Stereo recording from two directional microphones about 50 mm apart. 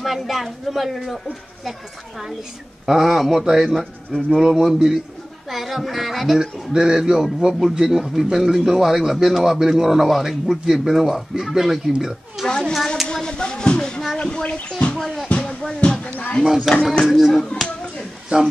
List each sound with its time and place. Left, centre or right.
0.0 s a man's voice: centre
12.4 s speech: centre
12.7 s speech: centre
13.1 s a sound: centre
14.1 s speech: centre
15.0 s speech: centre
15.2 s a sound: left
16.7 s a man's voice: centre
18.3 s speech: right